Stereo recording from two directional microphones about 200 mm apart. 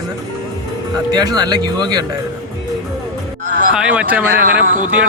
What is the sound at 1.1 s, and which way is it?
Speech, 20° right (ahead or behind).